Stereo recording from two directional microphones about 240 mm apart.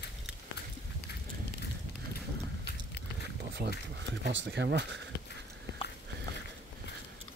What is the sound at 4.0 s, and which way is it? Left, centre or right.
Speech, right.